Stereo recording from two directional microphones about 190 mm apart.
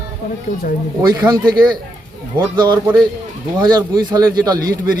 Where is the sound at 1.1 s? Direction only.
15° right (ahead or behind).